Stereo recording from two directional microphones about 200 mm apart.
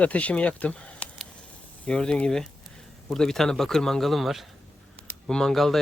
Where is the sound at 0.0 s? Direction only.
5° left (ahead or behind).